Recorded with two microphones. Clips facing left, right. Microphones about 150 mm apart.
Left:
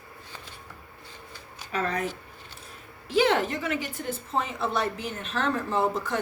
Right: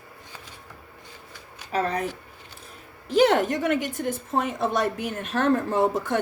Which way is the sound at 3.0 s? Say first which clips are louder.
Right 4 dB; 45° right (ahead or behind).